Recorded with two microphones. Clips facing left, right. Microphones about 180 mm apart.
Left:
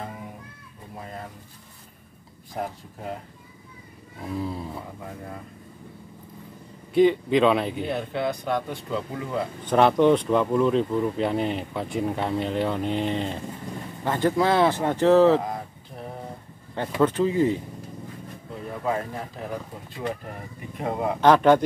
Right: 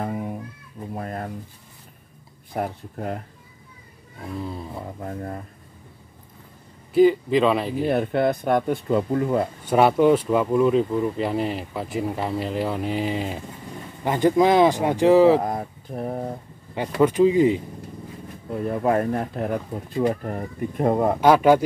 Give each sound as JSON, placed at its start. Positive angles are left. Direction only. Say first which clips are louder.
{"t": 0.9, "sound": "a sound", "louder": "right 6 dB", "side_deg": -60}
{"t": 2.5, "sound": "speech", "louder": "right 4 dB", "side_deg": -55}
{"t": 4.2, "sound": "speech", "louder": "left 1 dB", "side_deg": 0}
{"t": 5.0, "sound": "speech", "louder": "right 6 dB", "side_deg": -45}
{"t": 6.9, "sound": "speech", "louder": "right 2 dB", "side_deg": 0}
{"t": 7.9, "sound": "speech", "louder": "right 9 dB", "side_deg": -55}
{"t": 9.7, "sound": "speech", "louder": "right 1 dB", "side_deg": -5}
{"t": 15.4, "sound": "a sound", "louder": "right 5 dB", "side_deg": -50}
{"t": 17.0, "sound": "speech", "louder": "right 4 dB", "side_deg": -15}
{"t": 18.5, "sound": "speech", "louder": "right 6 dB", "side_deg": -55}
{"t": 20.0, "sound": "speech", "louder": "right 8 dB", "side_deg": -40}
{"t": 21.2, "sound": "speech", "louder": "even", "side_deg": -10}